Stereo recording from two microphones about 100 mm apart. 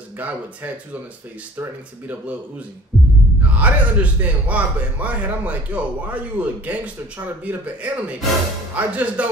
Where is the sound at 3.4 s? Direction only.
15° right (ahead or behind).